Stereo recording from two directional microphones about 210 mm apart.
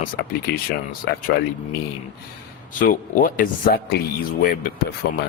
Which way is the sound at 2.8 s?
40° left (ahead or behind).